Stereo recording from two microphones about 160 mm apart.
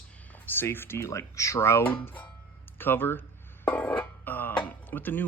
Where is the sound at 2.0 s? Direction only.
10° left (ahead or behind).